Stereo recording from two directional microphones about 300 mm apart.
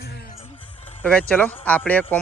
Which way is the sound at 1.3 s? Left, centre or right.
Centre.